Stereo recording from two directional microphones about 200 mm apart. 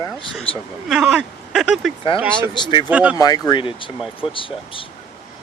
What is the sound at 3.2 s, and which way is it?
Speech, 20° left (ahead or behind).